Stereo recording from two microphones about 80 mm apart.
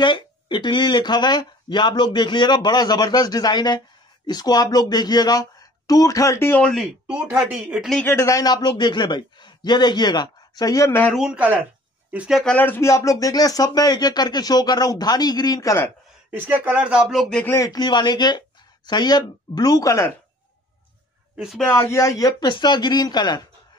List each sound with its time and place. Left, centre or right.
0.0 s speech: left
6.6 s speech: centre
7.1 s speech: centre
8.0 s speech: left
8.3 s speech: left
11.1 s speech: centre
12.4 s speech: left
12.8 s speech: left
16.3 s speech: right
17.6 s speech: left
21.9 s speech: left
22.5 s speech: left